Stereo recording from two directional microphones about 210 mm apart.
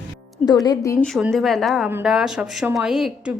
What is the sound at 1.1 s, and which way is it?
Speech, centre (ahead or behind).